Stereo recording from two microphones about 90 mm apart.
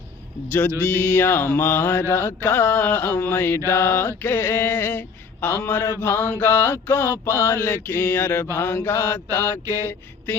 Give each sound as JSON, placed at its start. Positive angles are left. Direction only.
{"t": 1.0, "sound": "mantra", "side_deg": 20}